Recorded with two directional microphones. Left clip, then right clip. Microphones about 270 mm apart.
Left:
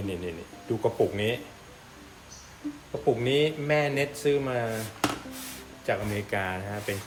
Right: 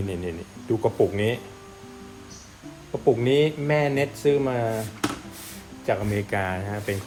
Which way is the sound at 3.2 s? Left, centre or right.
Right.